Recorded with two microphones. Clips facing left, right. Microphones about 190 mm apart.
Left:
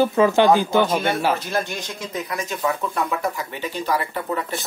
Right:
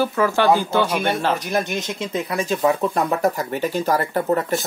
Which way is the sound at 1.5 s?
20° right (ahead or behind).